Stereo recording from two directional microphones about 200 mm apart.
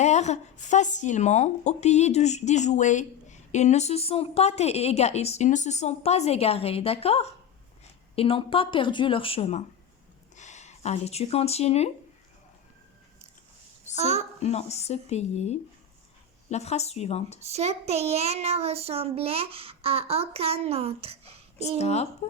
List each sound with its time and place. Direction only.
0.0 s speech: 35° left (ahead or behind)
13.9 s a woman's voice: 30° right (ahead or behind)
14.4 s speech: 30° left (ahead or behind)
17.5 s child singing: 30° right (ahead or behind)
21.8 s speech: 35° left (ahead or behind)